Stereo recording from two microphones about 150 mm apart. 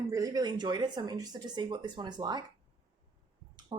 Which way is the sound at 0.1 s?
20° right (ahead or behind).